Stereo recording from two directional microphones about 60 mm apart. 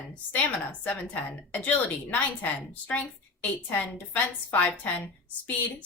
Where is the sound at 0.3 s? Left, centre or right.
Left.